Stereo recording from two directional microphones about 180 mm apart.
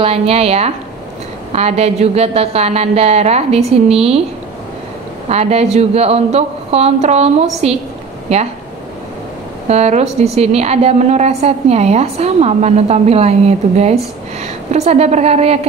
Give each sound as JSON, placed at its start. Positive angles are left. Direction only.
{"t": 0.0, "sound": "a woman's voice", "side_deg": -35}
{"t": 5.3, "sound": "a woman's voice", "side_deg": -35}
{"t": 9.7, "sound": "a woman's voice", "side_deg": -35}